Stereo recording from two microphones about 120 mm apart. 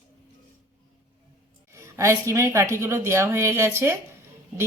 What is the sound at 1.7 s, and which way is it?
Speech, 25° right (ahead or behind).